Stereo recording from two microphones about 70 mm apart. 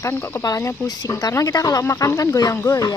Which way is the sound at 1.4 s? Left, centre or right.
Left.